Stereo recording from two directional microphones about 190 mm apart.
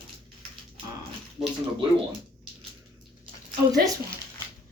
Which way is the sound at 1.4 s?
5° right (ahead or behind).